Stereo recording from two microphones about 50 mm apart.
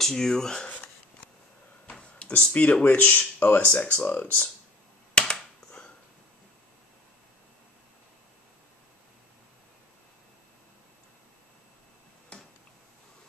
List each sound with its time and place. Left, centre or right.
0.0 s speech: centre
0.7 s a sound: left
2.0 s speech: left
3.3 s speech: left
3.6 s speech: left
5.3 s a sound: centre
12.3 s tick-tock: left